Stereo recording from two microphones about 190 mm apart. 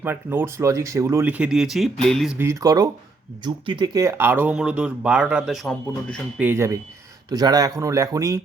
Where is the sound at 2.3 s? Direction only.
15° right (ahead or behind).